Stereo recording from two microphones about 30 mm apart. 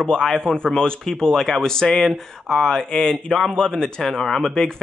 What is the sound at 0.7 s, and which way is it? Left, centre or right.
Speech, left.